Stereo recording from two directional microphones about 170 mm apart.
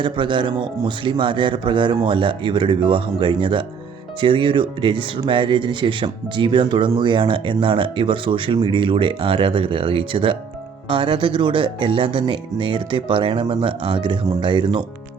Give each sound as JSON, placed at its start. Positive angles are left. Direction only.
{"t": 0.0, "sound": "speech", "side_deg": -30}